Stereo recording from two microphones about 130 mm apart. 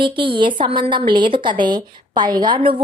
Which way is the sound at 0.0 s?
40° right (ahead or behind).